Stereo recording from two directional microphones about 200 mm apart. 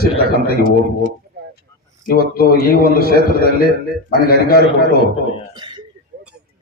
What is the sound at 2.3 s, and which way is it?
Speech, 50° left (ahead or behind).